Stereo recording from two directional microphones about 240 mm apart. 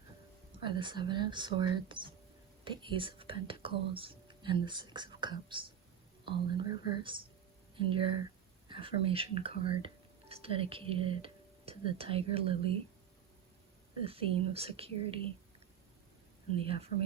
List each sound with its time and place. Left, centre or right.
0.6 s speech: centre
14.0 s speech: right
16.6 s speech: right